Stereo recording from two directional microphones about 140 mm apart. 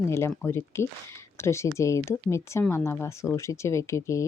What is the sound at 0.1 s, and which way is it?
Speech, 20° left (ahead or behind).